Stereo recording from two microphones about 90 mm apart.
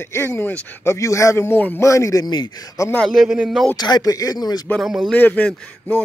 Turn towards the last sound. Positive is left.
turn(degrees=20)  # may be behind; listen again after turning